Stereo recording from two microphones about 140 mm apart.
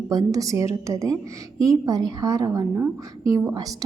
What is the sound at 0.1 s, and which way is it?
A woman's voice, 25° right (ahead or behind).